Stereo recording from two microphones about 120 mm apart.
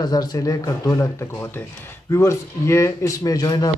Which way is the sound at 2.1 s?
25° left (ahead or behind).